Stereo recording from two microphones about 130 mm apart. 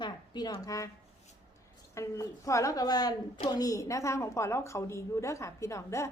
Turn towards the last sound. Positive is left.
turn(degrees=20)  # may be behind; listen again after turning